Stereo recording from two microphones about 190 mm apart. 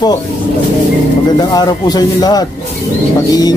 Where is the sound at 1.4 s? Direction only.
20° left (ahead or behind).